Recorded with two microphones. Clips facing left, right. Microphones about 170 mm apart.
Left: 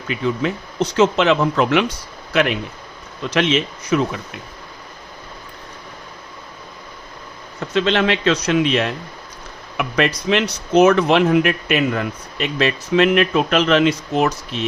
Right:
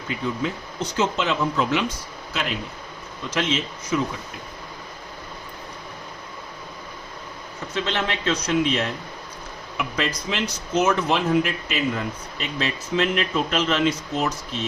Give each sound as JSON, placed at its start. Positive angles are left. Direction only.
{"t": 0.1, "sound": "speech", "side_deg": 75}
{"t": 7.7, "sound": "speech", "side_deg": 75}